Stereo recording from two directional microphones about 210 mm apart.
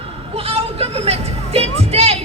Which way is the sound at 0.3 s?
30° right (ahead or behind).